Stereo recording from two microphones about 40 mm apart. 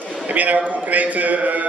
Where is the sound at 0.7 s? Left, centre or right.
Right.